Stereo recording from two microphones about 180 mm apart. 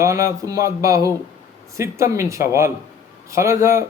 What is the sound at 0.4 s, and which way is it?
A man's voice, 20° right (ahead or behind).